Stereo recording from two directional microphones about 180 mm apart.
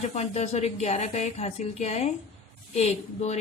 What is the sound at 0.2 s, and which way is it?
A woman's voice, 35° left (ahead or behind).